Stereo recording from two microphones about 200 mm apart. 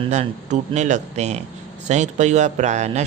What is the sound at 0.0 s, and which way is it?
Speech, 35° right (ahead or behind).